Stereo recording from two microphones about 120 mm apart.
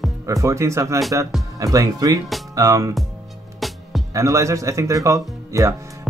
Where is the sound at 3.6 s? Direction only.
Centre (ahead or behind).